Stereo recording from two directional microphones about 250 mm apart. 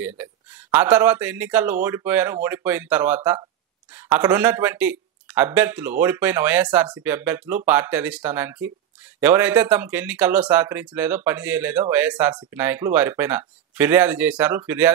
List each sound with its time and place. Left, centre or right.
0.2 s speech: centre